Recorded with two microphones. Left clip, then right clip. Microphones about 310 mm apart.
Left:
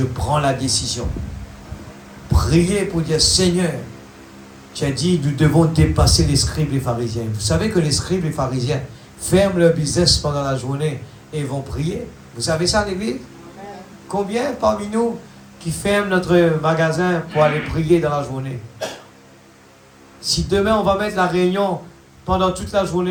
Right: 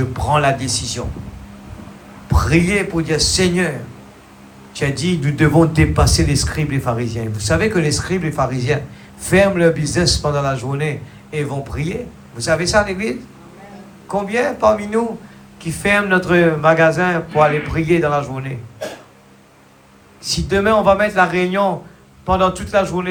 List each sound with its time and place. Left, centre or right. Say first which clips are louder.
0.1 s speech: right 6 dB; right
2.3 s speech: right 2 dB; right
4.8 s speech: even; right
20.3 s speech: right 2 dB; right